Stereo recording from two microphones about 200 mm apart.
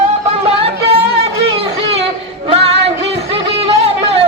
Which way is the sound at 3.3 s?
30° right (ahead or behind).